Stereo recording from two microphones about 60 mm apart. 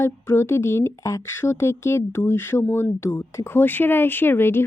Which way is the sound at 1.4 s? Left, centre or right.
Left.